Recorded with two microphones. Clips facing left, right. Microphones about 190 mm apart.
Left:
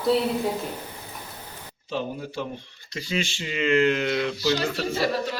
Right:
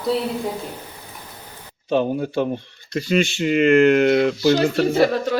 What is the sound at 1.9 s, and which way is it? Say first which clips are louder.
Speech: right 10 dB; 60° right (ahead or behind).